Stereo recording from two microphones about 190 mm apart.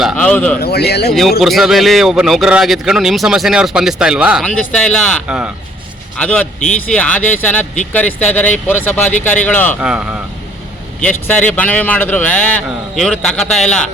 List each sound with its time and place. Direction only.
0.0 s a man's voice: 5° left (ahead or behind)
0.6 s speech: 60° left (ahead or behind)
1.1 s a man's voice: centre (ahead or behind)
9.8 s a man's voice: 5° right (ahead or behind)
11.0 s a man's voice: 10° left (ahead or behind)